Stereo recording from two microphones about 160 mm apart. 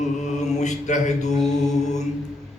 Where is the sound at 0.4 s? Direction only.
45° left (ahead or behind).